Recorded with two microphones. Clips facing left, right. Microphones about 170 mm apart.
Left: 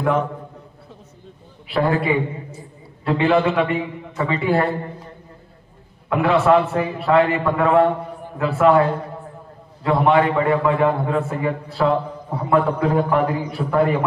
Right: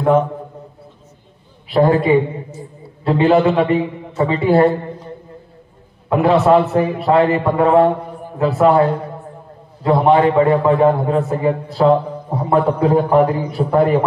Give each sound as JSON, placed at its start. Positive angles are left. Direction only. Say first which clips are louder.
{"t": 1.7, "sound": "a man's voice", "louder": "right 6 dB", "side_deg": -40}
{"t": 6.0, "sound": "a man's voice", "louder": "right 3 dB", "side_deg": -35}
{"t": 9.8, "sound": "a man's voice", "louder": "right 4 dB", "side_deg": -35}